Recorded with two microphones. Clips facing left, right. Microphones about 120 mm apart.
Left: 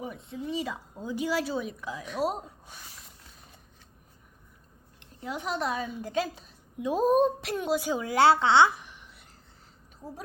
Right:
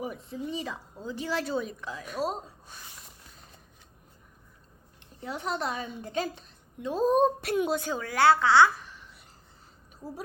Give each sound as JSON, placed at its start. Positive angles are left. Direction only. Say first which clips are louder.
{"t": 0.0, "sound": "a woman's voice", "louder": "right 1 dB", "side_deg": -5}
{"t": 5.2, "sound": "a woman's voice", "louder": "left 1 dB", "side_deg": 0}